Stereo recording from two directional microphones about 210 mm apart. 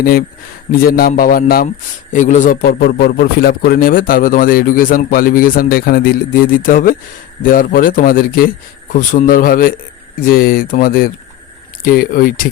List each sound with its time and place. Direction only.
0.0 s a man's voice: 45° left (ahead or behind)